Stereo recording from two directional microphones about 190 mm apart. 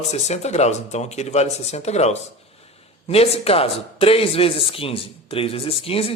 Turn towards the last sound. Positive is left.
turn(degrees=30)  # may be behind; listen again after turning